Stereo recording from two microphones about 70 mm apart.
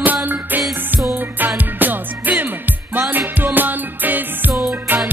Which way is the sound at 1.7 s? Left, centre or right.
Right.